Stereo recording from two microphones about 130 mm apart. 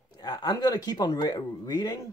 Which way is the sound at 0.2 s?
35° left (ahead or behind).